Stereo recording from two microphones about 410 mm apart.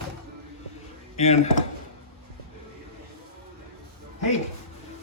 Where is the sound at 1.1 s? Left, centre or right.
Centre.